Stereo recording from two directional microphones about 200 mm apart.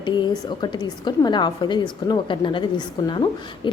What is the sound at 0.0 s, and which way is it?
A woman's voice, 20° left (ahead or behind).